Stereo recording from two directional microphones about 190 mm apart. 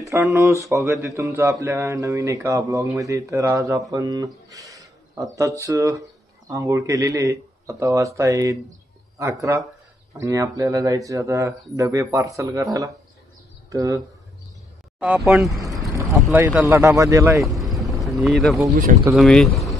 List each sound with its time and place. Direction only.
0.0 s a man's voice: 15° right (ahead or behind)
13.7 s speech: 15° right (ahead or behind)
15.0 s speech: 5° right (ahead or behind)
15.9 s boat: 15° right (ahead or behind)
16.3 s a man's voice: 10° right (ahead or behind)
17.5 s vehicle: centre (ahead or behind)
19.1 s speech: centre (ahead or behind)